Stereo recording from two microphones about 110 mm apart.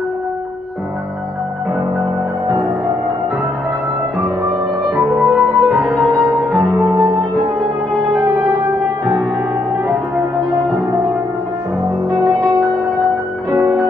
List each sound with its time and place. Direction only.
4.9 s music: centre (ahead or behind)
6.7 s music: 30° right (ahead or behind)
10.5 s music: 35° right (ahead or behind)